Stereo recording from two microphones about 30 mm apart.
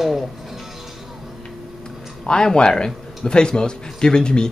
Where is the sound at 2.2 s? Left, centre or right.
Left.